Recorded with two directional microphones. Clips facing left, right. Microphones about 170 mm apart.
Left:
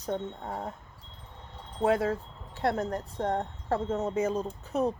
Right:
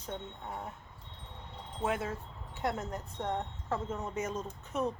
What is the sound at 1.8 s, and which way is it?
Wind chime, 35° left (ahead or behind).